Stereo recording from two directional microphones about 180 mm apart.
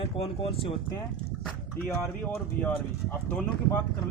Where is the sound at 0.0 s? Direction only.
30° left (ahead or behind).